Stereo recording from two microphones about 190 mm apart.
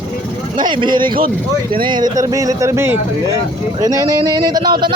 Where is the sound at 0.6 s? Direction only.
25° right (ahead or behind).